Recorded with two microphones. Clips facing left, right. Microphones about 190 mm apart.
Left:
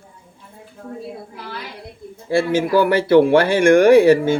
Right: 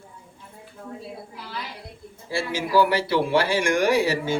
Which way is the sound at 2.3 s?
55° left (ahead or behind).